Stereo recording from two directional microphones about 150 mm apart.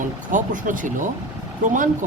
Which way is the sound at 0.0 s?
60° right (ahead or behind).